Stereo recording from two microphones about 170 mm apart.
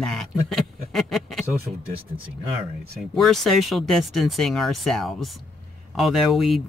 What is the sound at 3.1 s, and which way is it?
Speech, centre (ahead or behind).